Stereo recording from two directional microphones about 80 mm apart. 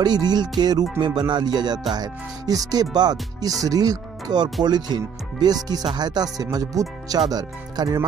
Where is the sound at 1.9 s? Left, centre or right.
Right.